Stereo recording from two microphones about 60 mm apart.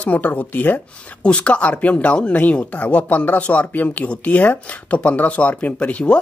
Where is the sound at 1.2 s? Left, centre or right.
Centre.